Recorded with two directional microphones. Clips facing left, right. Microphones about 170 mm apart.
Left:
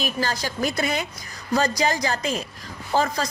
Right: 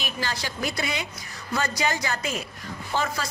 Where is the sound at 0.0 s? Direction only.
40° left (ahead or behind).